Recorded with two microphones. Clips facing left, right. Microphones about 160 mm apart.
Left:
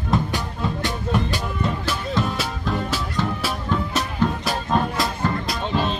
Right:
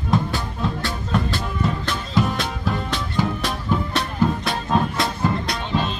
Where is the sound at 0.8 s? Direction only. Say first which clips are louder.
Left 1 dB; 15° left (ahead or behind).